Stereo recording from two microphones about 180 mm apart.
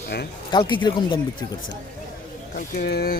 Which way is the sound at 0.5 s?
25° left (ahead or behind).